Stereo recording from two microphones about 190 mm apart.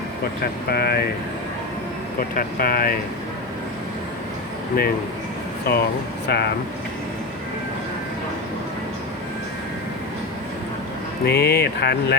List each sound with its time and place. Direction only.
0.7 s speech: 55° left (ahead or behind)
2.3 s speech: 50° left (ahead or behind)
5.7 s speech: 55° left (ahead or behind)
11.3 s speech: 55° left (ahead or behind)